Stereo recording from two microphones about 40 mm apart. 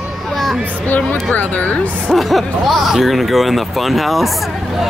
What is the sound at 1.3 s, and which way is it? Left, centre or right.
Speech, left.